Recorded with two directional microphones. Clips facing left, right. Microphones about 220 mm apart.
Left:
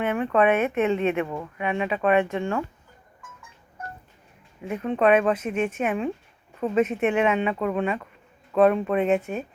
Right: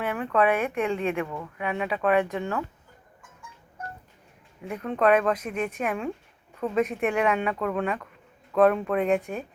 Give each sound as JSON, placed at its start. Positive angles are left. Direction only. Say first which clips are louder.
{"t": 0.0, "sound": "speech", "louder": "left 3 dB", "side_deg": 20}
{"t": 4.8, "sound": "speech", "louder": "left 2 dB", "side_deg": 15}